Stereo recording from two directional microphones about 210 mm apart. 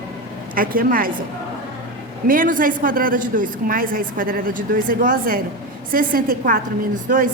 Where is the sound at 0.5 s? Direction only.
40° right (ahead or behind).